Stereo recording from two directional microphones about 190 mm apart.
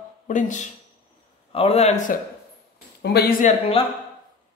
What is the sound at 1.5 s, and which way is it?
Speech, 30° left (ahead or behind).